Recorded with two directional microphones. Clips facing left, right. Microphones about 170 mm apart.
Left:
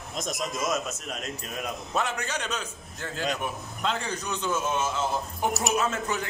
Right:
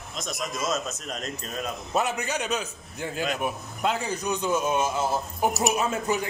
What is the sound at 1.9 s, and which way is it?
A man's voice, 10° right (ahead or behind).